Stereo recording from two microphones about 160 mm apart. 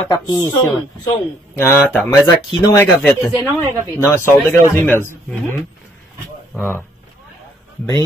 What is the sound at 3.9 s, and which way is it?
Speech, 15° left (ahead or behind).